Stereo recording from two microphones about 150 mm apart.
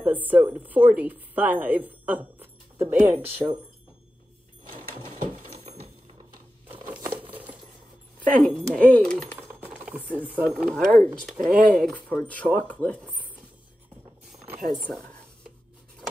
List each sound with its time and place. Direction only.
0.0 s a woman's voice: 10° right (ahead or behind)
5.6 s a sound: 40° right (ahead or behind)
6.7 s a sound: 10° right (ahead or behind)
7.2 s coin: 35° right (ahead or behind)
8.7 s speech: 10° left (ahead or behind)
9.6 s a sound: 10° right (ahead or behind)
10.5 s speech: 5° left (ahead or behind)
11.3 s speech: 65° right (ahead or behind)
11.7 s speech: 5° left (ahead or behind)
14.6 s speech: centre (ahead or behind)